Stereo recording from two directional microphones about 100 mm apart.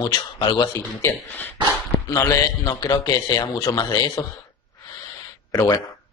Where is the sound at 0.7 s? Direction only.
25° left (ahead or behind).